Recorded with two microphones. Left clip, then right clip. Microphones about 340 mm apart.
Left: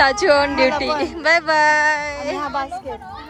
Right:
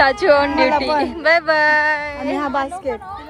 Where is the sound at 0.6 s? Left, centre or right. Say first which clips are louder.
Right 2 dB; right.